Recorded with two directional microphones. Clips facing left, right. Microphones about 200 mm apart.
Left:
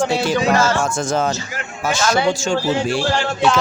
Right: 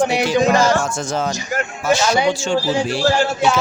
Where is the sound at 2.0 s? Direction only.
15° right (ahead or behind).